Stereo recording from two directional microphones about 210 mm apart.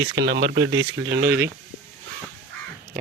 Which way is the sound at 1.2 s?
10° right (ahead or behind).